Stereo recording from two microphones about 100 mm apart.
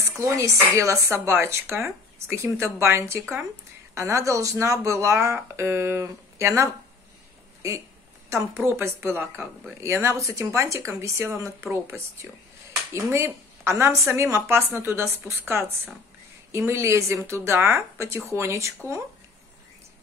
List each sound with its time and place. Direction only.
0.1 s speech: 30° right (ahead or behind)
8.3 s speech: 25° right (ahead or behind)